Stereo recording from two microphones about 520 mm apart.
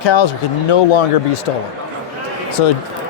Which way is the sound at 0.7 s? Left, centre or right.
Left.